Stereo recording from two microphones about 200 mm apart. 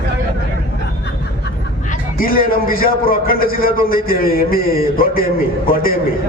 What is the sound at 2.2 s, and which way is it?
A man's voice, 45° left (ahead or behind).